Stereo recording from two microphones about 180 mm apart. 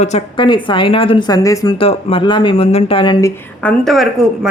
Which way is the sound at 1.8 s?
30° left (ahead or behind).